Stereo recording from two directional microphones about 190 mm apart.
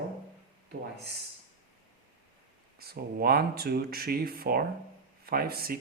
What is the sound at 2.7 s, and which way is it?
Speech, 55° right (ahead or behind).